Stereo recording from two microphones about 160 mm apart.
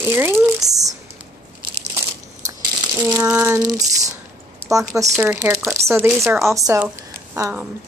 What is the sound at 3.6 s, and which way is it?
Speech, 20° right (ahead or behind).